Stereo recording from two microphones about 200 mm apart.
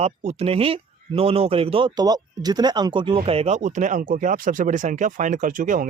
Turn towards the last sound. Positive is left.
turn(degrees=-40)  # may be behind; listen again after turning